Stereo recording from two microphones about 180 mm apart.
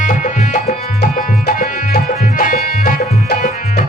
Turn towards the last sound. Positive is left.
turn(degrees=50)  # may be behind; listen again after turning